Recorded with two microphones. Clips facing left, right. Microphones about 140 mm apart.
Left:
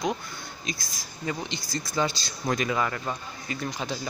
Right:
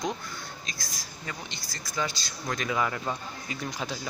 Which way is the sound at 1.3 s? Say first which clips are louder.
Left 9 dB; 20° left (ahead or behind).